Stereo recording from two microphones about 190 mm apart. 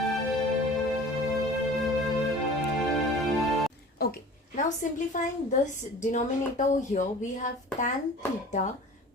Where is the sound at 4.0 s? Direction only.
50° left (ahead or behind).